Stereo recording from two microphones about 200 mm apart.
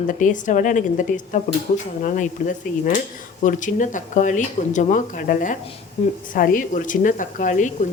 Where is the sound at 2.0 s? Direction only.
40° left (ahead or behind).